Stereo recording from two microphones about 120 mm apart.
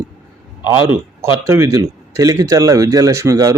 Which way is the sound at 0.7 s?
20° right (ahead or behind).